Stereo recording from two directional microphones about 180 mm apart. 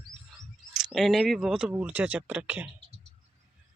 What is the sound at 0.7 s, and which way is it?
Speech, centre (ahead or behind).